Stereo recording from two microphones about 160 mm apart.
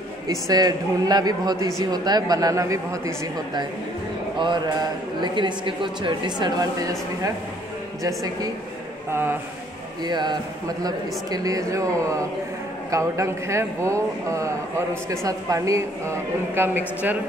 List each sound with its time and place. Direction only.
0.3 s speech: 25° right (ahead or behind)
10.0 s speech: 25° right (ahead or behind); by 17.2 s 10° right (ahead or behind)